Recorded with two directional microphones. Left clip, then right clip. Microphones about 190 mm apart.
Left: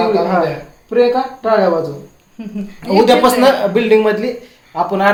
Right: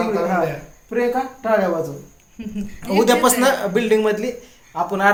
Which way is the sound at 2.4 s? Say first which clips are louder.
Left 3 dB; 30° left (ahead or behind).